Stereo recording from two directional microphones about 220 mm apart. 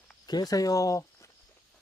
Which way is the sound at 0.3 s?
20° left (ahead or behind).